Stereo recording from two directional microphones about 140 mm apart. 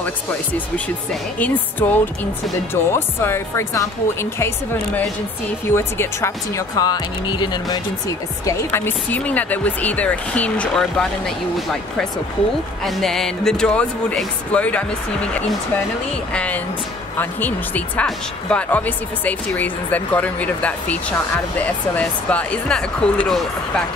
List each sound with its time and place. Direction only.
1.4 s speech: 15° left (ahead or behind)
5.7 s speech: 15° left (ahead or behind)
8.5 s speech: 15° left (ahead or behind)
16.3 s speech: 10° left (ahead or behind)